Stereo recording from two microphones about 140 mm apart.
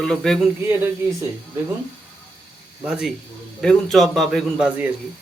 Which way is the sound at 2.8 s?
5° right (ahead or behind).